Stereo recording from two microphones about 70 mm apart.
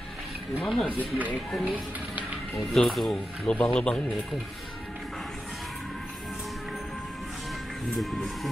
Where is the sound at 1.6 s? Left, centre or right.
Right.